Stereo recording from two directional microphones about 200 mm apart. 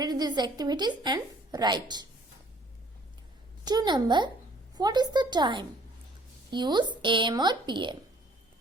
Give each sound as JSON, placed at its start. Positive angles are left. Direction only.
{"t": 0.0, "sound": "a woman's voice", "side_deg": -20}
{"t": 3.6, "sound": "a woman's voice", "side_deg": -20}